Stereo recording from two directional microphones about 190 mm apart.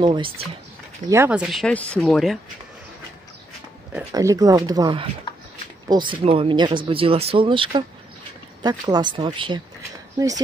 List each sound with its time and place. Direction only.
0.0 s speech: 25° right (ahead or behind)
1.1 s speech: 10° right (ahead or behind)
4.1 s speech: 15° right (ahead or behind)